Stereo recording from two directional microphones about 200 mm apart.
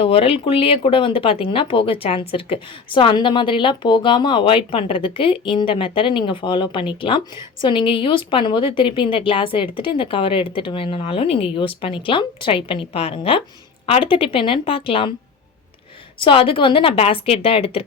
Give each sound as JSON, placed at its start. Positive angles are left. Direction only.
{"t": 0.0, "sound": "speech", "side_deg": 30}
{"t": 16.1, "sound": "speech", "side_deg": 25}